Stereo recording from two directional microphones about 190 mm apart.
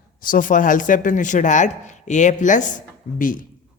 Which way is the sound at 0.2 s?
45° left (ahead or behind).